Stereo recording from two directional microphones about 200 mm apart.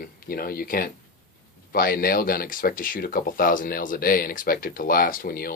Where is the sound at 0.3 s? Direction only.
45° left (ahead or behind).